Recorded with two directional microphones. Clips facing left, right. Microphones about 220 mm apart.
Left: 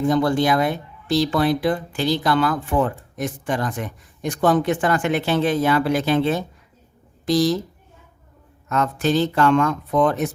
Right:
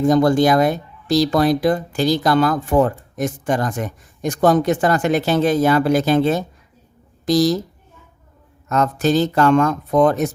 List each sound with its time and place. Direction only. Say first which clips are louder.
0.0 s speech: right 4 dB; 40° right (ahead or behind)
8.7 s speech: right 3 dB; 40° right (ahead or behind)